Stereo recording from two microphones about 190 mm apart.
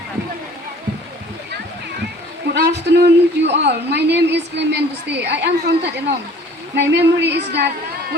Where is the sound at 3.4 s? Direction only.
65° right (ahead or behind).